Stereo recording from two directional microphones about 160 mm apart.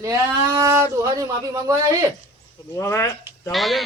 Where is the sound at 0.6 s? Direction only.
20° right (ahead or behind).